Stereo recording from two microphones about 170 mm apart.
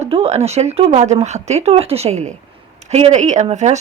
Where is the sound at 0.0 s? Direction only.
40° right (ahead or behind).